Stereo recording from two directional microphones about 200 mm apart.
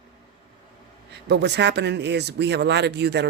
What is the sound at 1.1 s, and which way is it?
Speech, 55° right (ahead or behind).